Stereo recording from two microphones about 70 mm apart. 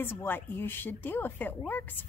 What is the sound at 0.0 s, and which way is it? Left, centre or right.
A woman's voice, left.